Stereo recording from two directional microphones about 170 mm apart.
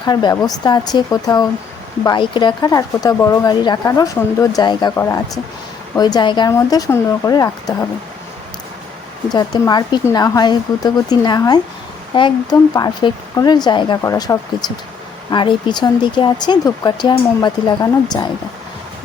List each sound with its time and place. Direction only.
0.0 s speech: 25° left (ahead or behind)
9.3 s speech: 25° left (ahead or behind)